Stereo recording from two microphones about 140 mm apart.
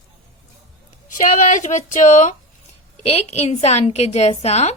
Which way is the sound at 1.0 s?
65° left (ahead or behind).